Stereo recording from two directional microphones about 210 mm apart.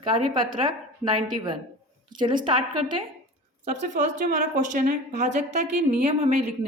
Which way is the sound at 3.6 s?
35° right (ahead or behind).